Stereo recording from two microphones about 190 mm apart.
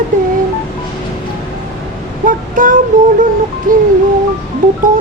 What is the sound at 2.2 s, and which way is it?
Child singing, 45° right (ahead or behind).